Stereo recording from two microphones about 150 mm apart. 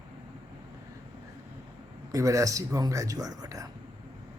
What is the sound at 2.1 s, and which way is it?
Speech, 20° right (ahead or behind).